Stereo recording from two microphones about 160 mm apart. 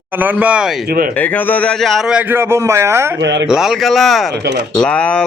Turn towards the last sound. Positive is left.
turn(degrees=5)  # may be behind; listen again after turning